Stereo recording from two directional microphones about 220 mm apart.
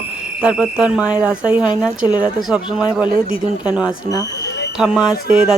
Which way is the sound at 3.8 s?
15° left (ahead or behind).